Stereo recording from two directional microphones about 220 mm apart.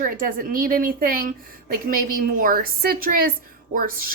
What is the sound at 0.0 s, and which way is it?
A woman's voice, 40° right (ahead or behind).